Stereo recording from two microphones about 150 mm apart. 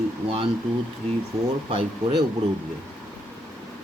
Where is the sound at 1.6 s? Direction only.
30° right (ahead or behind).